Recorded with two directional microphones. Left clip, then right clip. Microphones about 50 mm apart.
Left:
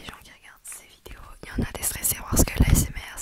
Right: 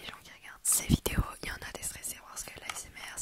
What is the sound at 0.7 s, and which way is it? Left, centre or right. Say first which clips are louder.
Whispering: right 14 dB; right.